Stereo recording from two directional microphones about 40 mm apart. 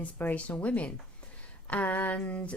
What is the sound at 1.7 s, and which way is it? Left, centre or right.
Speech, left.